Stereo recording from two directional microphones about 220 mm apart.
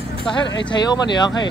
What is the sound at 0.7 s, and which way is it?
Speech, 20° left (ahead or behind).